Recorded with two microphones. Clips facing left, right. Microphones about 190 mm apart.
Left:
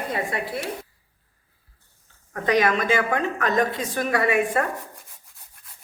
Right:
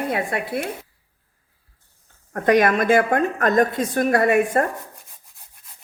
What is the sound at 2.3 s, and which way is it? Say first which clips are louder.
A woman's voice: right 4 dB; 55° right (ahead or behind).